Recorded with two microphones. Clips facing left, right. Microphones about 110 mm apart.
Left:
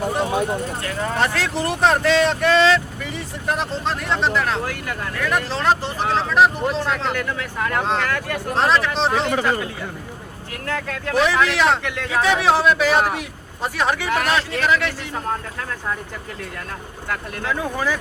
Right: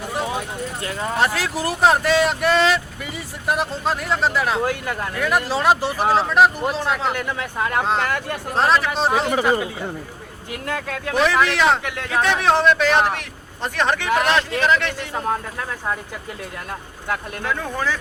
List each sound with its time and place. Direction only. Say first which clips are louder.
1.2 s speech: right 1 dB; 5° right (ahead or behind)
4.6 s speech: right 4 dB; 20° right (ahead or behind)
7.2 s speech: even; 20° right (ahead or behind)
8.5 s speech: right 1 dB; centre (ahead or behind)
10.7 s speech: left 1 dB; 15° right (ahead or behind)
11.1 s speech: even; centre (ahead or behind)
12.1 s speech: even; 5° left (ahead or behind)
17.5 s speech: left 1 dB; 10° left (ahead or behind)